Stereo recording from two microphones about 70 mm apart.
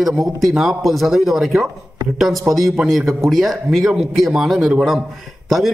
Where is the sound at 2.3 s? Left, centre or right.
Right.